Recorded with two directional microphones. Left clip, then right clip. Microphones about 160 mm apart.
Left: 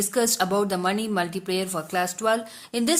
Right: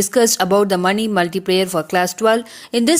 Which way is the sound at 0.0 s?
40° right (ahead or behind).